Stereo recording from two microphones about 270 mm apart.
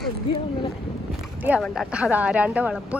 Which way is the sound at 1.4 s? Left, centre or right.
Centre.